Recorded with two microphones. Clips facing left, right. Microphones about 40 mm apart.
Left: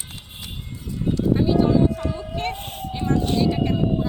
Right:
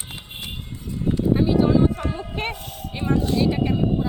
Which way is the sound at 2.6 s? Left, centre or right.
Left.